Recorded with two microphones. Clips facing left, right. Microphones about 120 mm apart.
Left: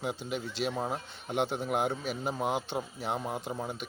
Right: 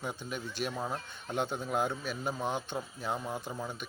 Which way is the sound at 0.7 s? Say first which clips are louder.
Left 3 dB; 20° left (ahead or behind).